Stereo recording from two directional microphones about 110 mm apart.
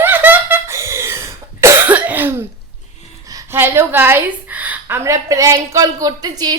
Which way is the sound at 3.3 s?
30° right (ahead or behind).